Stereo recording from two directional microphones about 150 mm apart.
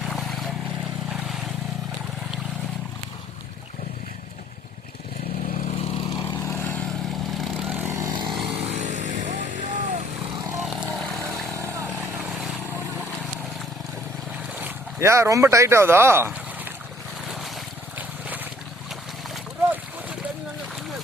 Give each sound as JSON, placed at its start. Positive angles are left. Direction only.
{"t": 0.1, "sound": "vehicle", "side_deg": 0}
{"t": 5.5, "sound": "vehicle", "side_deg": 45}
{"t": 6.4, "sound": "vehicle", "side_deg": 15}
{"t": 8.3, "sound": "vehicle", "side_deg": -5}
{"t": 8.7, "sound": "vehicle", "side_deg": -55}
{"t": 10.6, "sound": "vehicle", "side_deg": -5}
{"t": 11.6, "sound": "vehicle", "side_deg": -20}
{"t": 11.9, "sound": "vehicle", "side_deg": -10}
{"t": 14.6, "sound": "speech", "side_deg": -20}
{"t": 17.2, "sound": "boat", "side_deg": 0}